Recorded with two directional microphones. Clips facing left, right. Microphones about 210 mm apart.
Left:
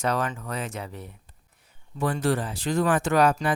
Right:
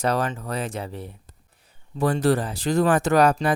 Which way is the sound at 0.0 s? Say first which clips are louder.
Right 3 dB; 35° right (ahead or behind).